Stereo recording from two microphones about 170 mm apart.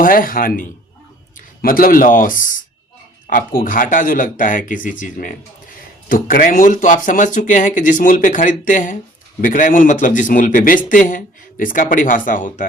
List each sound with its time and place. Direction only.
0.0 s speech: 55° left (ahead or behind)